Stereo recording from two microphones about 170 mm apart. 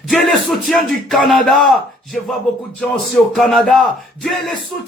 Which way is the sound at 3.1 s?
Centre (ahead or behind).